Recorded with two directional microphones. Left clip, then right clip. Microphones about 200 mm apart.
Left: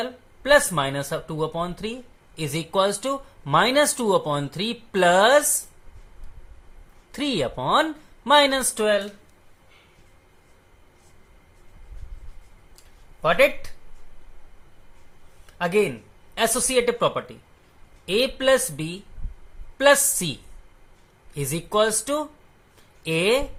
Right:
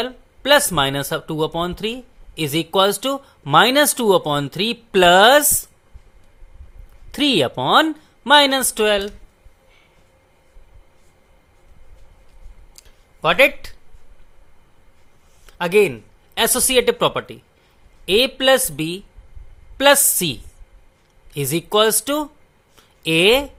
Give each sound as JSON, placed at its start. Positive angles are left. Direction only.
{"t": 0.0, "sound": "speech", "side_deg": -40}
{"t": 7.1, "sound": "speech", "side_deg": -35}
{"t": 13.2, "sound": "speech", "side_deg": -40}
{"t": 15.4, "sound": "a sound", "side_deg": -40}
{"t": 16.3, "sound": "speech", "side_deg": -40}